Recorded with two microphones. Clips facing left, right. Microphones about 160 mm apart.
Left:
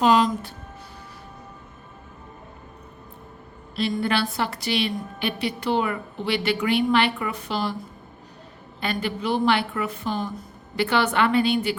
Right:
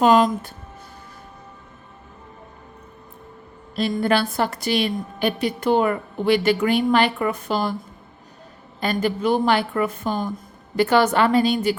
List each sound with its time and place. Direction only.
0.0 s a woman's voice: 50° right (ahead or behind)
3.8 s a woman's voice: 45° right (ahead or behind)
8.8 s a woman's voice: 40° right (ahead or behind)